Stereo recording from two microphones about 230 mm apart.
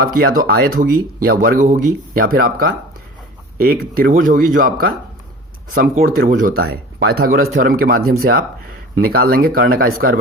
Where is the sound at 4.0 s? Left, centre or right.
Right.